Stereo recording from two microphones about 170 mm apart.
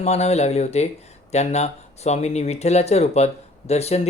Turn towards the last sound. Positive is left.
turn(degrees=40)  # may be behind; listen again after turning